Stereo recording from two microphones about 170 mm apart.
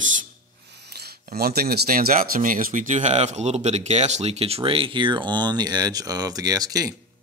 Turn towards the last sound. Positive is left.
turn(degrees=-20)  # may be behind; listen again after turning